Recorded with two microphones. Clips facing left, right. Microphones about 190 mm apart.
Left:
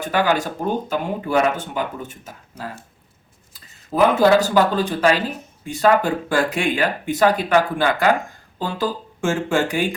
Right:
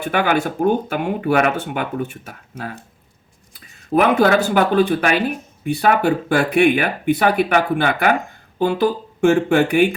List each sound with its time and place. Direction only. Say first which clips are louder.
0.1 s speech: right 1 dB; 55° right (ahead or behind)
3.9 s speech: even; 70° right (ahead or behind)